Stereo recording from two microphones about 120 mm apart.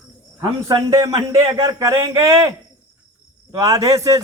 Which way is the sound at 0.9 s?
30° right (ahead or behind).